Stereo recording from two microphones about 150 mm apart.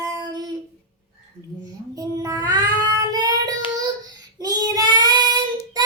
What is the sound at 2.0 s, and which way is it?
Child singing, 25° right (ahead or behind).